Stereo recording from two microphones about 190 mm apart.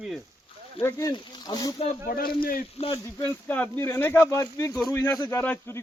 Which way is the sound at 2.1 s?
50° left (ahead or behind).